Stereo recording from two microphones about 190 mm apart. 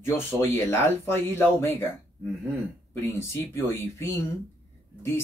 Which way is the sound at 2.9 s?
15° left (ahead or behind).